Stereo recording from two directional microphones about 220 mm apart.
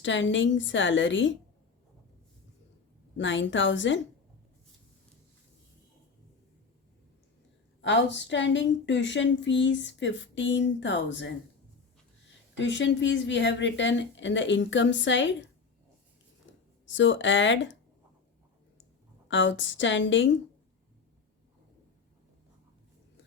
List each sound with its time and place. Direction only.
0.0 s a woman's voice: 55° left (ahead or behind)
3.2 s a woman's voice: 55° left (ahead or behind)
7.8 s a woman's voice: 55° left (ahead or behind)
12.5 s a woman's voice: 55° left (ahead or behind)
16.9 s a woman's voice: 60° left (ahead or behind)
19.3 s a woman's voice: 60° left (ahead or behind)